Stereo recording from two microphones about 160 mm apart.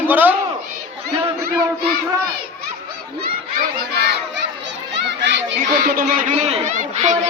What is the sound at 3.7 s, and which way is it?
Crowd, 85° right.